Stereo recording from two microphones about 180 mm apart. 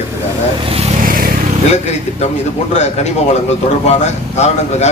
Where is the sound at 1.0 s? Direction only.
50° right (ahead or behind).